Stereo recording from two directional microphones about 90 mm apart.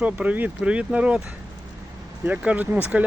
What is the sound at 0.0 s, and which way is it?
Speech, 15° right (ahead or behind).